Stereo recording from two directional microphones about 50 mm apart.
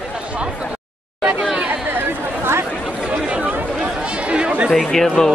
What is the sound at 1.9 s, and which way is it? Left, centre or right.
Chatter, right.